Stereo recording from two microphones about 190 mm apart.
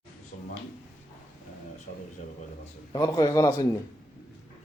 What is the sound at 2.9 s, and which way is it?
Speech, 20° left (ahead or behind).